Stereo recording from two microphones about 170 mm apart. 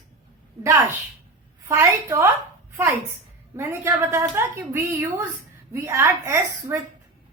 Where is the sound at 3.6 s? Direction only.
15° right (ahead or behind).